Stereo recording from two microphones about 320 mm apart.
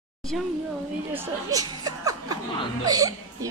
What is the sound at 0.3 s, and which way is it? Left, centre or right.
Speech, centre.